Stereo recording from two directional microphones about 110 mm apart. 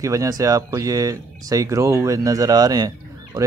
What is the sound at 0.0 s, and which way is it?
Speech, 30° right (ahead or behind).